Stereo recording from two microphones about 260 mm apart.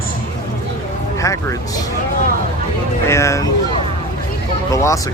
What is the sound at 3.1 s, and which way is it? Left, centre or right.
Speech, centre.